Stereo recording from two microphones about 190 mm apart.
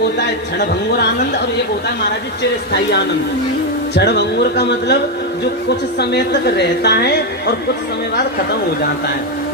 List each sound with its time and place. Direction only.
0.6 s speech: 60° left (ahead or behind)
6.0 s speech: 60° left (ahead or behind)